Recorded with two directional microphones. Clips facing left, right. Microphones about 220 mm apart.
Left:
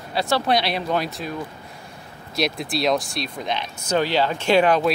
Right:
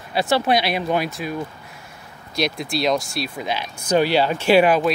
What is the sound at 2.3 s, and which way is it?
Speech, centre (ahead or behind).